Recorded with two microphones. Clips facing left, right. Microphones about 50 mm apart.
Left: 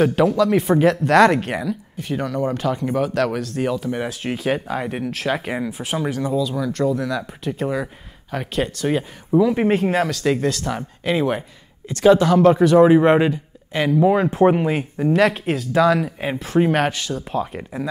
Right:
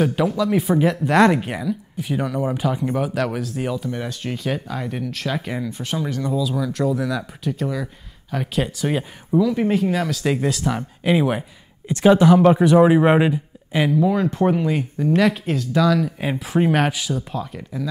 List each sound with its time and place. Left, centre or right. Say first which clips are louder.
0.0 s speech: left 3 dB; centre
4.4 s speech: left 4 dB; centre
4.6 s speech: left 3 dB; left; by 7.5 s centre
7.5 s speech: left 4 dB; left
8.3 s speech: even; centre
9.4 s speech: left 2 dB; left
10.0 s speech: left 2 dB; centre
10.4 s speech: even; centre
11.9 s speech: even; right
13.9 s speech: left 6 dB; left
15.3 s speech: left 1 dB; centre
15.8 s speech: left 2 dB; left
16.3 s speech: left 1 dB; centre
17.3 s speech: left 4 dB; left